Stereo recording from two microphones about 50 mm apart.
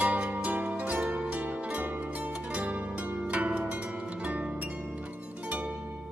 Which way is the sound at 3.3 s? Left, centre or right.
Right.